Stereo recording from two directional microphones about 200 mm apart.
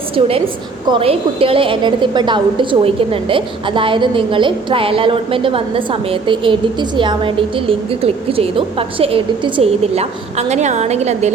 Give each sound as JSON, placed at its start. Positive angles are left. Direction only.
{"t": 0.2, "sound": "a woman's voice", "side_deg": -30}